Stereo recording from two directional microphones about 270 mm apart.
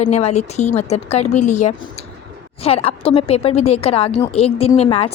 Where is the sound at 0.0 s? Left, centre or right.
Left.